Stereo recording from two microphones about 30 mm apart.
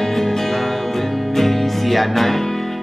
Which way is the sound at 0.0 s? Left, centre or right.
Centre.